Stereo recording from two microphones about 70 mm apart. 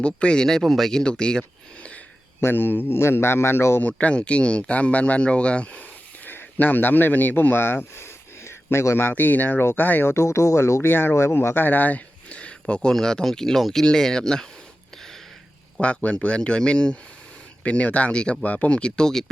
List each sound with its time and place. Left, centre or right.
0.0 s speech: centre
2.4 s a man's voice: left
3.8 s speech: centre
6.2 s speech: left
9.0 s speech: left; by 14.4 s centre
15.8 s speech: centre